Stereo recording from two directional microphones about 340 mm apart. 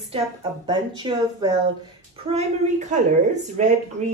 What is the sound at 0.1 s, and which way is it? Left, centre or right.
Speech, centre.